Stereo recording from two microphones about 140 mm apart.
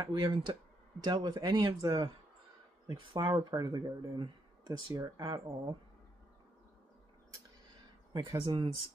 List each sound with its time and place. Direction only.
0.0 s speech: 30° right (ahead or behind)
3.1 s speech: 35° right (ahead or behind)
8.1 s speech: 25° right (ahead or behind)
8.4 s speech: 35° right (ahead or behind)